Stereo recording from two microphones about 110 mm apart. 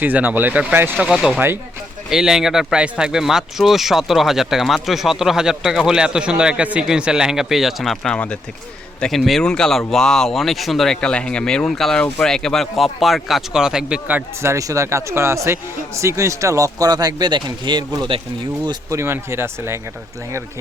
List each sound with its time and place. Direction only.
0.0 s speech: 15° right (ahead or behind)
14.4 s speech: 30° right (ahead or behind)
18.9 s speech: 25° right (ahead or behind)